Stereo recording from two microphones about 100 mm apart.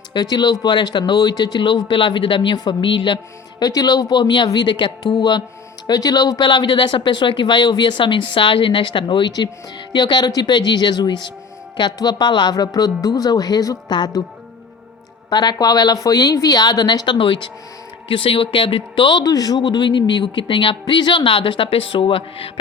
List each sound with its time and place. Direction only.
0.1 s speech: 45° left (ahead or behind)
3.6 s speech: 40° left (ahead or behind)
5.9 s speech: 40° left (ahead or behind)
6.5 s speech: 55° left (ahead or behind)
15.3 s speech: 45° left (ahead or behind)
17.2 s speech: 55° left (ahead or behind)
19.2 s speech: 40° left (ahead or behind); by 22.5 s 65° left (ahead or behind)